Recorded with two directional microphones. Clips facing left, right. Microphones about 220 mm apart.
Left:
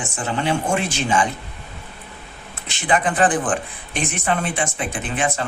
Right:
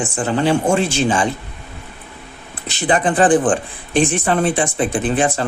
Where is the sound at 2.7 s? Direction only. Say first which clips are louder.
Right 4 dB; 35° right (ahead or behind).